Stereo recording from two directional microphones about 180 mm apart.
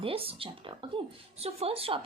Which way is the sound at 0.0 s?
30° right (ahead or behind).